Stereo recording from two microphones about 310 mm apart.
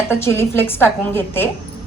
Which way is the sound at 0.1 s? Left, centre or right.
Centre.